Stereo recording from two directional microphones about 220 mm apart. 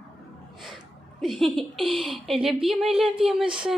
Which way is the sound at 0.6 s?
Centre (ahead or behind).